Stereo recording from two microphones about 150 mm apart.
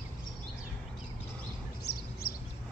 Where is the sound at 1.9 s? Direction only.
90° left.